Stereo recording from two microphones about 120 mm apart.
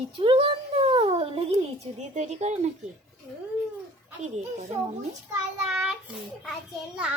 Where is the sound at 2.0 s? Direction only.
70° right (ahead or behind).